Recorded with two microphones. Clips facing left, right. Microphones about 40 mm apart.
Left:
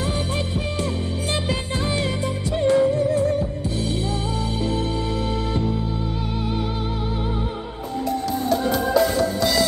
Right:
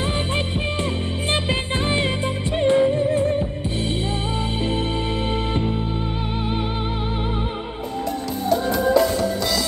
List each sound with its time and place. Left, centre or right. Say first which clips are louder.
0.0 s music: right 2 dB; right